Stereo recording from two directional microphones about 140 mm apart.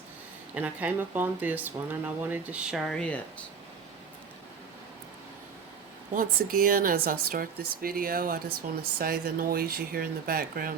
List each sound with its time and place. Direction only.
0.5 s speech: 10° right (ahead or behind); by 3.2 s 5° left (ahead or behind)
6.1 s speech: 90° right